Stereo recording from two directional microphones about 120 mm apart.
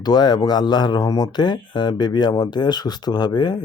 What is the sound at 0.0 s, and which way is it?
Speech, 35° left (ahead or behind).